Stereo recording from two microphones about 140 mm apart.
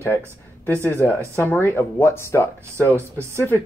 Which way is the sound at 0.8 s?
15° left (ahead or behind).